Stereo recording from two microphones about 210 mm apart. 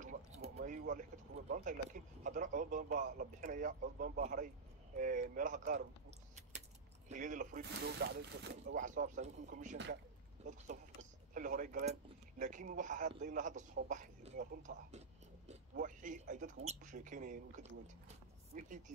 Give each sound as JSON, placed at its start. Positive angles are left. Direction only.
{"t": 0.0, "sound": "a sound", "side_deg": -30}
{"t": 1.5, "sound": "speech", "side_deg": -35}
{"t": 7.7, "sound": "speech", "side_deg": -55}
{"t": 8.7, "sound": "speech", "side_deg": -35}
{"t": 14.9, "sound": "a sound", "side_deg": -30}
{"t": 15.8, "sound": "speech", "side_deg": -40}